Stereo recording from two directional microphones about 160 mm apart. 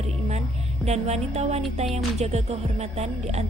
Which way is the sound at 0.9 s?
40° right (ahead or behind).